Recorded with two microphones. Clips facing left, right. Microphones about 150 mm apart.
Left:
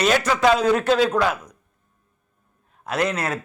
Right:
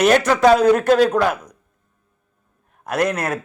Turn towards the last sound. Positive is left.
turn(degrees=-45)  # may be behind; listen again after turning